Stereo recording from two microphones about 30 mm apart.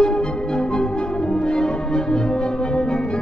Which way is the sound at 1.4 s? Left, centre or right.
Left.